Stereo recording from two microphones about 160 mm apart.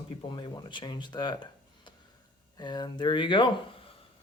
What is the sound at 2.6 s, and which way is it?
Speech, 25° left (ahead or behind).